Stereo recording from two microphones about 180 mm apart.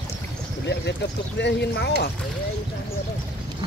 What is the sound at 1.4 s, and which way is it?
Speech, 70° left (ahead or behind).